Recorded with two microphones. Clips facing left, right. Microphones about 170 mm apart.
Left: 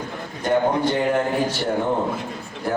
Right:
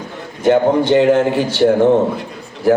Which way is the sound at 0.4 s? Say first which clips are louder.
Right 7 dB; 90° right.